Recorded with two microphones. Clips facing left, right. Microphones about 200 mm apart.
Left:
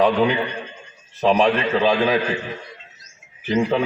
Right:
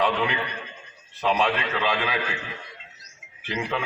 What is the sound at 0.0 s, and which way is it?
A man's voice, 40° left (ahead or behind).